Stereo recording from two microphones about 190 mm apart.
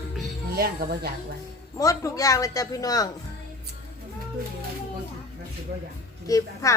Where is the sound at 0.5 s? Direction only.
55° right (ahead or behind).